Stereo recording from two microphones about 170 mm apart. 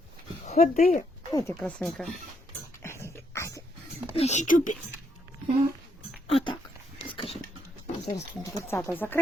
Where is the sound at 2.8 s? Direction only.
15° left (ahead or behind).